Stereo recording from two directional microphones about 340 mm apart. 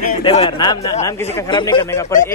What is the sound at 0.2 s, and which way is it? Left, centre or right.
Speech, centre.